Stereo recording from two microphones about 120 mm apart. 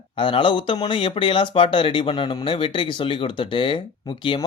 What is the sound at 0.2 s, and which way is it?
Speech, 45° left (ahead or behind).